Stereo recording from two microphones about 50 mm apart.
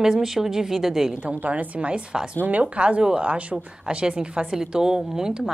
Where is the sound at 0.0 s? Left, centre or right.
Centre.